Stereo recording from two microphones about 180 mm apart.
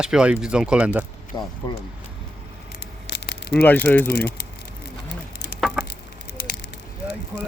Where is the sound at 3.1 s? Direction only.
70° left (ahead or behind).